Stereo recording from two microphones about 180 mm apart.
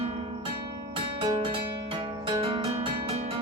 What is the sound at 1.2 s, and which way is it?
Music, 30° right (ahead or behind).